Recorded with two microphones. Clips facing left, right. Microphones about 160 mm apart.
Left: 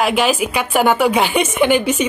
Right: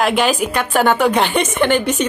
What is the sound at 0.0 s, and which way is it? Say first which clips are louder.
A woman's voice: even; 5° left (ahead or behind).